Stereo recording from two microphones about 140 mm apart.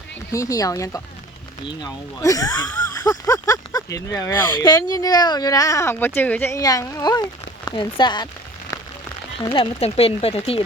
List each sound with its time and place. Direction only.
0.3 s speech: 25° left (ahead or behind)
6.6 s speech: 25° left (ahead or behind)
9.5 s speech: 45° left (ahead or behind)